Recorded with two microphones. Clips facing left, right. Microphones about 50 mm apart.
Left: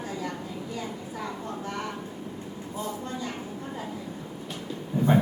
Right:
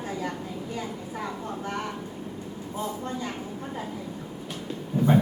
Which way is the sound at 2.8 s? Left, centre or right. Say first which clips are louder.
Right 2 dB; right.